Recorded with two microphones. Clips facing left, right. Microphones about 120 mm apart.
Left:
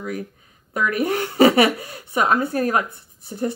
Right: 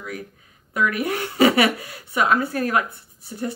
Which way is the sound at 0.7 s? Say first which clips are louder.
Left 2 dB; 30° left (ahead or behind).